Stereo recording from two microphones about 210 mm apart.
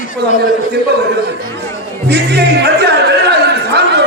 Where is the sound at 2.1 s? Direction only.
50° right (ahead or behind).